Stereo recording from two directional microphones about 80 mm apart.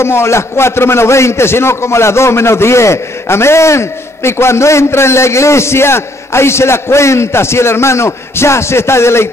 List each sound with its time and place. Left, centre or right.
0.0 s a man's voice: left